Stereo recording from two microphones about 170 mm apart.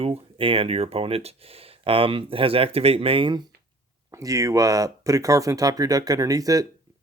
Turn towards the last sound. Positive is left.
turn(degrees=-20)  # may be behind; listen again after turning